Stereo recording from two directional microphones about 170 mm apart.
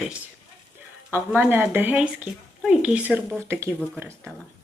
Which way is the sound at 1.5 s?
10° right (ahead or behind).